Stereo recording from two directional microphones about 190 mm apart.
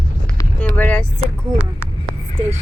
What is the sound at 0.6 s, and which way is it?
Speech, 5° left (ahead or behind).